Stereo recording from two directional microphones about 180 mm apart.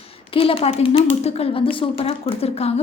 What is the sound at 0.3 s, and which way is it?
A woman's voice, 30° left (ahead or behind).